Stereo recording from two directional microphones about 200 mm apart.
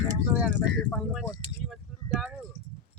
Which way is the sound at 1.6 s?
Centre (ahead or behind).